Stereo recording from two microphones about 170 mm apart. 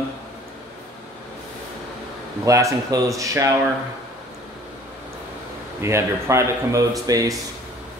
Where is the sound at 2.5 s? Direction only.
20° right (ahead or behind).